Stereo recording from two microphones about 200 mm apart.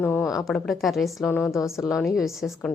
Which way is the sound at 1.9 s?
Centre (ahead or behind).